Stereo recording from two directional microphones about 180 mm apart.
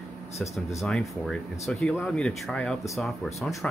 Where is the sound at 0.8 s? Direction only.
Centre (ahead or behind).